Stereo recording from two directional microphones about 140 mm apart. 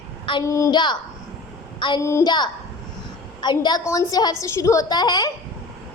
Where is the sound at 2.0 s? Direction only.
25° left (ahead or behind).